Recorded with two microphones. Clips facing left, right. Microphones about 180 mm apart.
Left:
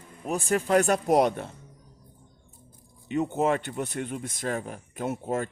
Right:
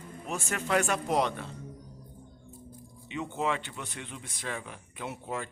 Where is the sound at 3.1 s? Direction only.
45° left (ahead or behind).